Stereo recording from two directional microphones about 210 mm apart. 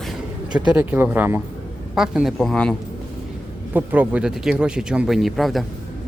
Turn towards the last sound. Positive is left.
turn(degrees=0)  # may be behind; listen again after turning